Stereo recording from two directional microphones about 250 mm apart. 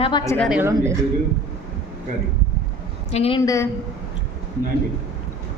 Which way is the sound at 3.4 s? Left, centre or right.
Centre.